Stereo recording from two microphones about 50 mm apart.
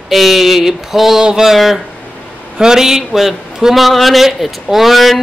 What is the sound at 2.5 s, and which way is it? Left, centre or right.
Speech, centre.